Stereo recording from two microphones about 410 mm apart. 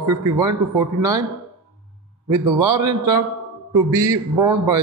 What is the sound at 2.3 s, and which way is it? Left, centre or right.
A man's voice, centre.